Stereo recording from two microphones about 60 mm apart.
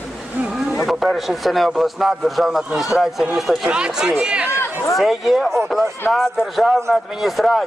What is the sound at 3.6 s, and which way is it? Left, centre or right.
Speech, centre.